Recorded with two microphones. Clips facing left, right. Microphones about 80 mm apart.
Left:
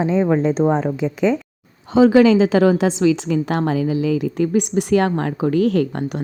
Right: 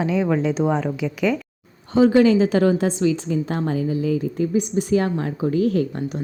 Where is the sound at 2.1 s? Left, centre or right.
Left.